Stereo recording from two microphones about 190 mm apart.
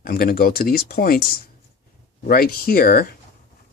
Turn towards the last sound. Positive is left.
turn(degrees=50)  # may be behind; listen again after turning